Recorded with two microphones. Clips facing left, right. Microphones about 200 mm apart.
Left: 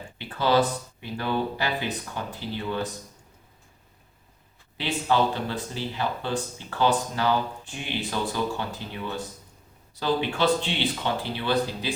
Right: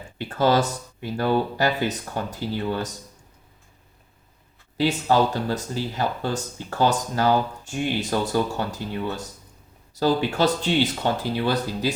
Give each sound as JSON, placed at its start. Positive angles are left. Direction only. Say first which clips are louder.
{"t": 0.2, "sound": "speech", "louder": "right 2 dB", "side_deg": -45}
{"t": 4.8, "sound": "speech", "louder": "right 4 dB", "side_deg": -40}